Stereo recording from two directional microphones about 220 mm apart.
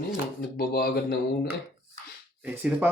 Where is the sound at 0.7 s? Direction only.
45° left (ahead or behind).